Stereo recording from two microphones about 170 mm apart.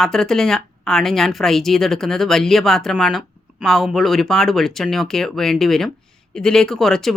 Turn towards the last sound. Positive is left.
turn(degrees=0)  # may be behind; listen again after turning